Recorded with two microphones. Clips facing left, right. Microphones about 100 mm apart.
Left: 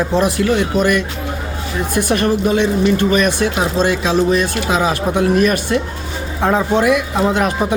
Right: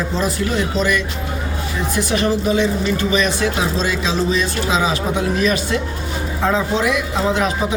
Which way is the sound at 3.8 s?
55° left (ahead or behind).